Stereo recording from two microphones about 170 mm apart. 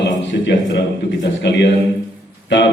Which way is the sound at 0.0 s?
90° left.